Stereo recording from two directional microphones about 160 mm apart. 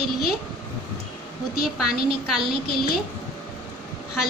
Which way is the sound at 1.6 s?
5° right (ahead or behind).